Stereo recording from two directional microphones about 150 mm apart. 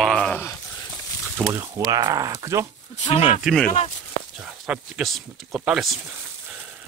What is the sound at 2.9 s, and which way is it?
Speech, 50° left (ahead or behind).